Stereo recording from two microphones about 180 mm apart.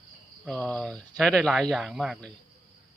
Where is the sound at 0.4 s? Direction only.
5° left (ahead or behind).